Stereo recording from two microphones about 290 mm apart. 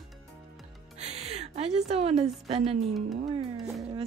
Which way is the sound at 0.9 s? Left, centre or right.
Right.